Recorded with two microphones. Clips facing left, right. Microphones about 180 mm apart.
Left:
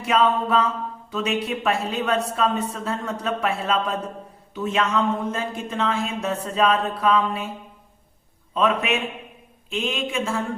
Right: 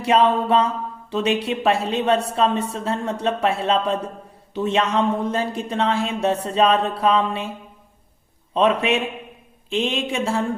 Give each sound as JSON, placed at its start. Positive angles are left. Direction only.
{"t": 0.0, "sound": "speech", "side_deg": -30}
{"t": 8.5, "sound": "speech", "side_deg": -30}